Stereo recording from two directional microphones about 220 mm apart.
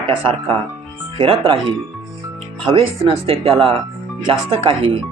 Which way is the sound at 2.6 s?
25° right (ahead or behind).